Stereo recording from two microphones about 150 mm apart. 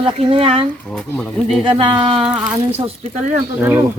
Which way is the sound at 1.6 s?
35° right (ahead or behind).